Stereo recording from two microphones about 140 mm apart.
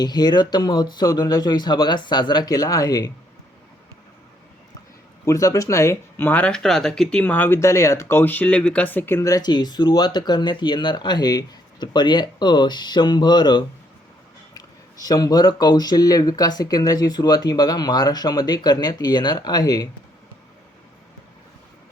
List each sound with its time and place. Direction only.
0.0 s speech: 30° left (ahead or behind)
5.2 s speech: 25° left (ahead or behind)
15.0 s speech: 25° left (ahead or behind)